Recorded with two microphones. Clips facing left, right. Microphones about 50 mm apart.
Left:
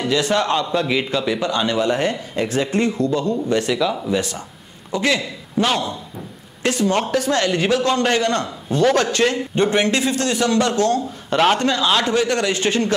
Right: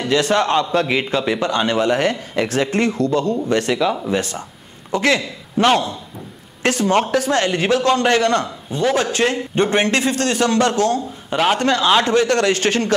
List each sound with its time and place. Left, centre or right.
0.1 s a man's voice: right
3.7 s speech: centre
4.1 s a man's voice: right
4.9 s a man's voice: right
6.9 s a man's voice: right
8.6 s speech: centre
9.3 s a man's voice: right
11.2 s a man's voice: centre
11.8 s speech: right
12.1 s a man's voice: right